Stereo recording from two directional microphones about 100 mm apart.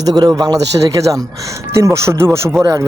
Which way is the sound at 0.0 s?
40° right (ahead or behind).